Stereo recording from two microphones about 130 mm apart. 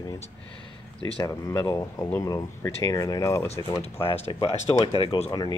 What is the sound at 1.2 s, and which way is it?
Speech, 25° left (ahead or behind).